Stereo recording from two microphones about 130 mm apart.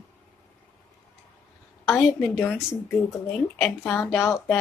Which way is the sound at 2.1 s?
15° left (ahead or behind).